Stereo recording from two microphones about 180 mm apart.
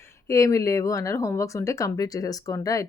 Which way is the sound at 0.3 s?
15° left (ahead or behind).